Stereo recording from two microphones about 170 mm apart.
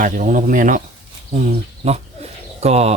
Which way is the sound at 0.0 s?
50° right (ahead or behind).